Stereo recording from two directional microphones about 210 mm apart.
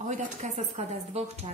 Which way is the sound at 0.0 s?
35° right (ahead or behind).